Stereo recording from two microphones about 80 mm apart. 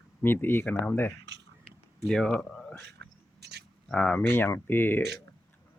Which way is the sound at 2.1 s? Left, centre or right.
Centre.